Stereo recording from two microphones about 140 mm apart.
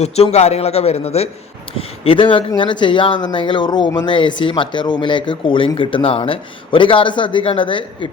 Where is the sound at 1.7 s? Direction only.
40° left (ahead or behind).